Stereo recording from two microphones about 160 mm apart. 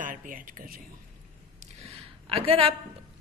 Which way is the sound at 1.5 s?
40° right (ahead or behind).